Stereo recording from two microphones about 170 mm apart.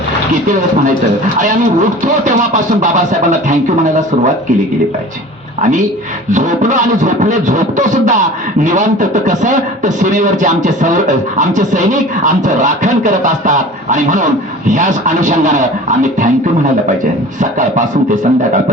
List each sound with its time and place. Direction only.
2.2 s speech: 45° right (ahead or behind)
6.3 s speech: 45° right (ahead or behind)
17.4 s speech: 45° right (ahead or behind)